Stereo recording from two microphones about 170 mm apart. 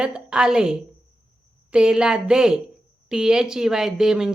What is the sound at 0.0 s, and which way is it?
Speech, 5° right (ahead or behind).